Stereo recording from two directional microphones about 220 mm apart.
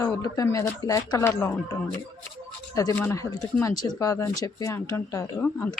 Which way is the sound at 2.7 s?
10° left (ahead or behind).